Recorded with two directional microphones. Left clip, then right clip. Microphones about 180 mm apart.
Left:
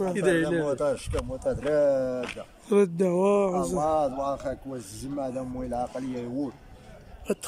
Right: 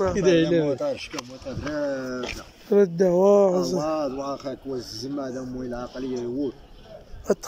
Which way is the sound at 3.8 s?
20° left (ahead or behind).